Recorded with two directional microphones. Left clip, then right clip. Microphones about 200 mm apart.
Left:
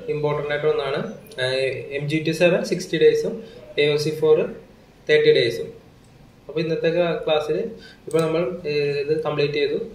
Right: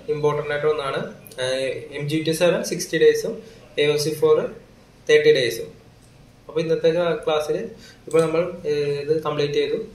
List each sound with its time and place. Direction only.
0.2 s a man's voice: 20° right (ahead or behind)
6.5 s a man's voice: 20° right (ahead or behind)